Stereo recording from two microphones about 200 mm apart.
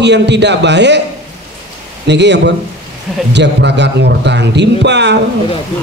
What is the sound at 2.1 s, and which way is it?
A man's voice, 60° right (ahead or behind).